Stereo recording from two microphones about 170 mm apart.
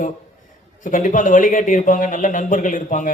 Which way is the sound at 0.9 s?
50° left (ahead or behind).